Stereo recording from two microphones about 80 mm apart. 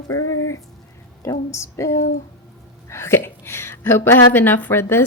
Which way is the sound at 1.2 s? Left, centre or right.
Left.